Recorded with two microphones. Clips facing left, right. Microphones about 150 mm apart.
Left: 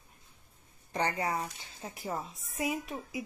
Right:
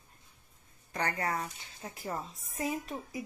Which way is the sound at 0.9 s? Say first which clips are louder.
Left 2 dB; 20° left (ahead or behind).